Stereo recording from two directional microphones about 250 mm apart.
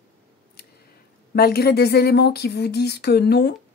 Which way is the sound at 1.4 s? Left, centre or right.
Left.